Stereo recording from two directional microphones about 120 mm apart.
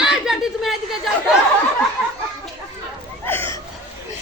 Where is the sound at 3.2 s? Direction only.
20° left (ahead or behind).